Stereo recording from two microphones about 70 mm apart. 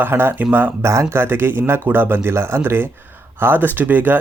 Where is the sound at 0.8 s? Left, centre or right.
Right.